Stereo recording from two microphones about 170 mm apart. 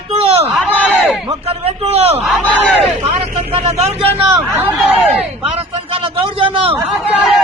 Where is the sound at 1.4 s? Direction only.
35° right (ahead or behind).